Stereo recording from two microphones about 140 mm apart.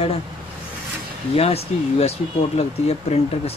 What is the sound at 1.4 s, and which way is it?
Speech, 45° left (ahead or behind).